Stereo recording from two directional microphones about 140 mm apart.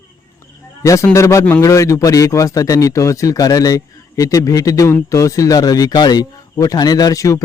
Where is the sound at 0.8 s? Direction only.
20° left (ahead or behind).